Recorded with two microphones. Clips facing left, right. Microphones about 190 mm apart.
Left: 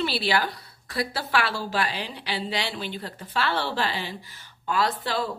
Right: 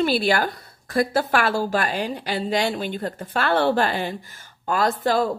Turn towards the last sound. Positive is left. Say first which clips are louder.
# right 7 dB
turn(degrees=-45)  # may be behind; listen again after turning